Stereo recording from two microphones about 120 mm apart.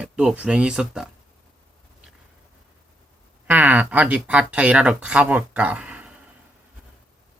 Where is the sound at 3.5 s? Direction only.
15° right (ahead or behind).